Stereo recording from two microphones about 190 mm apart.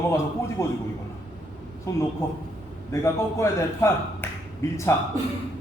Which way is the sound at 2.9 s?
15° left (ahead or behind).